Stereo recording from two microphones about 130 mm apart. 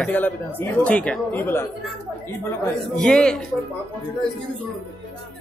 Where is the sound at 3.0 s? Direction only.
5° left (ahead or behind).